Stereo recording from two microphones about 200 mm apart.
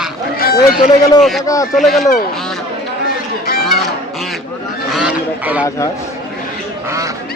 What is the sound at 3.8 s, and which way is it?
Goose, centre (ahead or behind).